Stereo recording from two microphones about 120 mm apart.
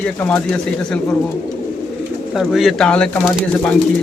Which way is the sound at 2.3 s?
Centre (ahead or behind).